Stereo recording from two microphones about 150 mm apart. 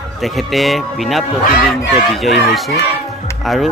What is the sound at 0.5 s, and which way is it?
Speech, centre (ahead or behind).